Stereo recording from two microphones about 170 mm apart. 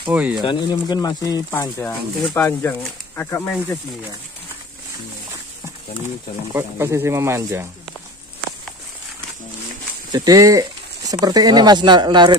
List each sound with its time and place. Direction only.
0.0 s speech: 5° right (ahead or behind)
0.5 s speech: 25° left (ahead or behind)
6.5 s speech: 15° right (ahead or behind)
10.1 s speech: 20° right (ahead or behind)